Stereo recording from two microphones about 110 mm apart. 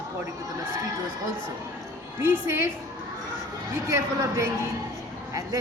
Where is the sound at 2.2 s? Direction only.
20° right (ahead or behind).